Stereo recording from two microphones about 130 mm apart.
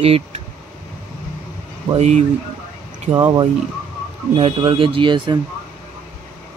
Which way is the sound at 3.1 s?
30° right (ahead or behind).